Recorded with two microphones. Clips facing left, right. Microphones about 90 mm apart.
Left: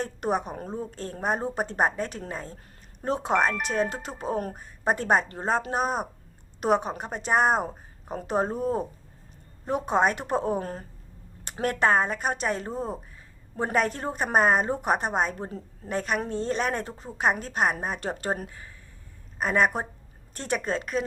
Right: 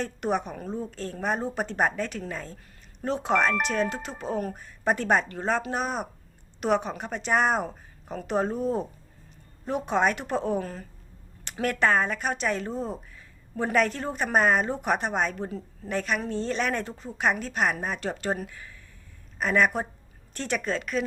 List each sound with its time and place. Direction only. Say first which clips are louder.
0.0 s a woman's voice: even; 40° left (ahead or behind)